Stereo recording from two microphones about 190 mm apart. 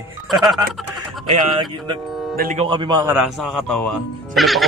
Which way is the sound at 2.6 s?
25° right (ahead or behind).